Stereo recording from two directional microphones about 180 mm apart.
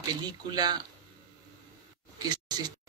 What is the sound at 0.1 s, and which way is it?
Speech, 25° right (ahead or behind).